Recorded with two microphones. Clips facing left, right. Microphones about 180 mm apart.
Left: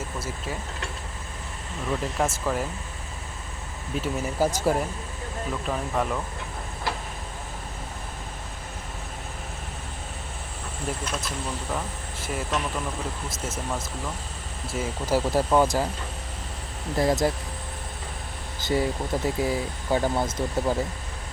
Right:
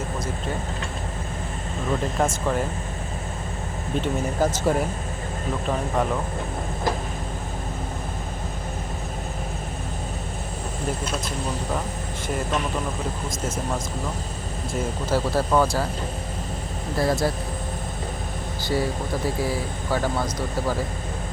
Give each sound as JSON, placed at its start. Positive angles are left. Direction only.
{"t": 2.1, "sound": "speech", "side_deg": 5}
{"t": 3.9, "sound": "speech", "side_deg": 5}
{"t": 14.7, "sound": "speech", "side_deg": 10}
{"t": 17.0, "sound": "speech", "side_deg": 15}
{"t": 18.7, "sound": "speech", "side_deg": 20}